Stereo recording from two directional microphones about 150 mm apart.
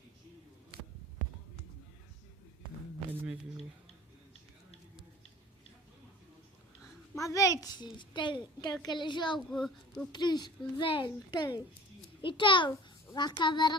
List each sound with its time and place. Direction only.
7.2 s a child's voice: 20° left (ahead or behind)
9.5 s speech: 5° left (ahead or behind)
10.1 s a child's voice: 30° left (ahead or behind)